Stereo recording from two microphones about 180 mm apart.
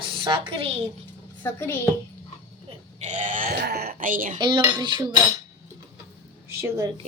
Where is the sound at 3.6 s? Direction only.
60° right (ahead or behind).